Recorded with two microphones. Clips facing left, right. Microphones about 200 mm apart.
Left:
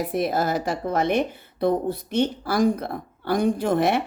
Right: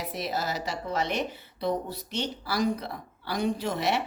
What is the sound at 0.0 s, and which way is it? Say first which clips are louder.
A woman's voice: left 8 dB; 50° left (ahead or behind).